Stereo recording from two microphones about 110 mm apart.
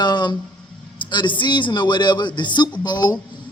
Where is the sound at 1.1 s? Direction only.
45° left (ahead or behind).